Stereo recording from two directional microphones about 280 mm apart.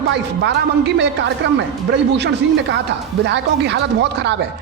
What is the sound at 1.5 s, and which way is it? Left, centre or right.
Speech, right.